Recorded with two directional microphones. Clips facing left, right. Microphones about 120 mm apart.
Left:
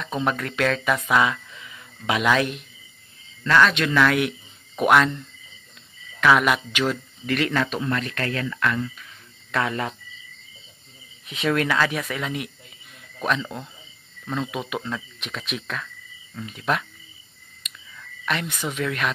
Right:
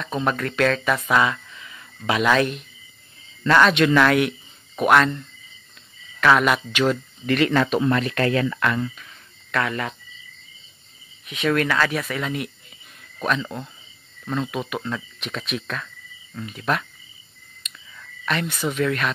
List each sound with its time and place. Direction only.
0.0 s speech: 10° left (ahead or behind)
3.4 s speech: 5° right (ahead or behind)
4.7 s speech: 10° left (ahead or behind)
6.2 s speech: 5° left (ahead or behind); by 8.9 s 15° right (ahead or behind)
9.5 s speech: 20° left (ahead or behind)
11.2 s speech: 25° left (ahead or behind); by 16.8 s 10° left (ahead or behind)
18.2 s a sound: 10° left (ahead or behind)
18.5 s speech: 5° right (ahead or behind)
18.8 s speech: 10° left (ahead or behind)